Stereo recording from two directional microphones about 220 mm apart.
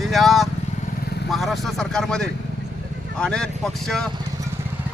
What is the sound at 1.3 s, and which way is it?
Speech, centre (ahead or behind).